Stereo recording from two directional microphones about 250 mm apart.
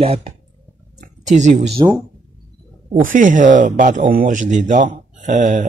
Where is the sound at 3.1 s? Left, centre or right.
Right.